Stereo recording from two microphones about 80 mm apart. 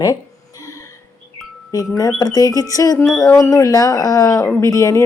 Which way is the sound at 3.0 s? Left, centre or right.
Centre.